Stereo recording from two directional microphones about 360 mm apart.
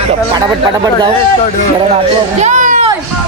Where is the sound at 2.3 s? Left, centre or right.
Centre.